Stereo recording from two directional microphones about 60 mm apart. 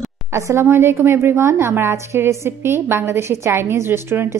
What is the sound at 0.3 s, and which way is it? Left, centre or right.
A woman's voice, right.